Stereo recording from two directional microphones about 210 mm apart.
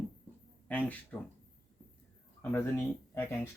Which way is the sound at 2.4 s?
10° left (ahead or behind).